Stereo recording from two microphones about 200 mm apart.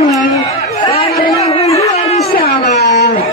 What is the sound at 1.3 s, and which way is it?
Speech, 30° left (ahead or behind).